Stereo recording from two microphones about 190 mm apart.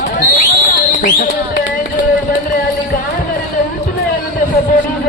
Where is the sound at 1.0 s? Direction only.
50° left (ahead or behind).